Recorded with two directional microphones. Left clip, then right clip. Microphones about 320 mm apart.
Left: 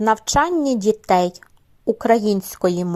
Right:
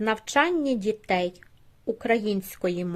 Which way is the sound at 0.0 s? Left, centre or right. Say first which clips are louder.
Left 6 dB; centre.